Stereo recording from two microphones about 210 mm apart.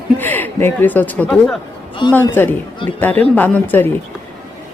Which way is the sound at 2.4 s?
10° left (ahead or behind).